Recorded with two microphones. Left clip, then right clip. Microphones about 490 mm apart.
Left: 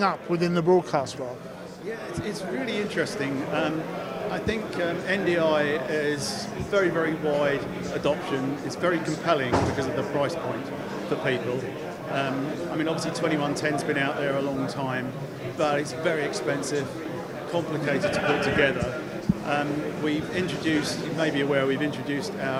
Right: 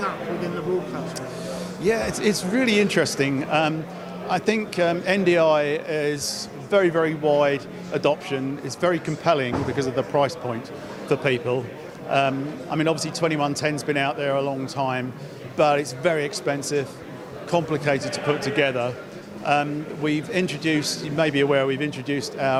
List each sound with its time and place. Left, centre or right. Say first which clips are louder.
1.8 s speech: right 12 dB; right
12.7 s speech: right 6 dB; right
20.1 s speech: right 5 dB; right